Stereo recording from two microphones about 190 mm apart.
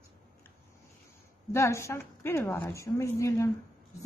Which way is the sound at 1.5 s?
15° left (ahead or behind).